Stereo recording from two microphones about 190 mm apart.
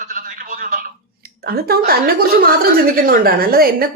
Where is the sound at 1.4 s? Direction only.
55° right (ahead or behind).